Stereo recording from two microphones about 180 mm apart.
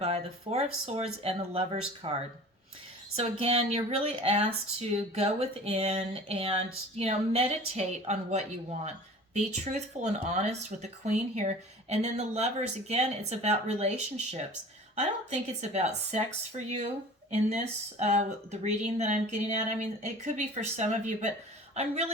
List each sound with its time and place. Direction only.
0.0 s speech: 35° right (ahead or behind)
17.3 s speech: 35° right (ahead or behind)